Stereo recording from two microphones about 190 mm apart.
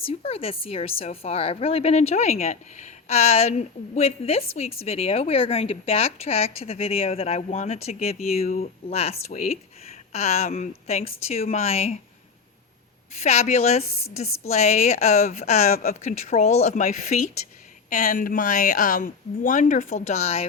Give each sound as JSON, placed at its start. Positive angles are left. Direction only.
{"t": 0.1, "sound": "a woman's voice", "side_deg": 35}
{"t": 13.1, "sound": "a woman's voice", "side_deg": 35}